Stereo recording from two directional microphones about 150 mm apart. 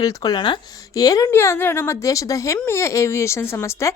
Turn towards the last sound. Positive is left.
turn(degrees=20)  # may be behind; listen again after turning